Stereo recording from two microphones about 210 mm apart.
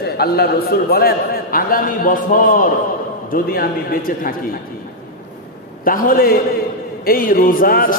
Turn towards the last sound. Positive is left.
turn(degrees=45)  # may be behind; listen again after turning